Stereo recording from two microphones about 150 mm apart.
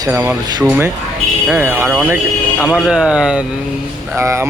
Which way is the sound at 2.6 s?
5° right (ahead or behind).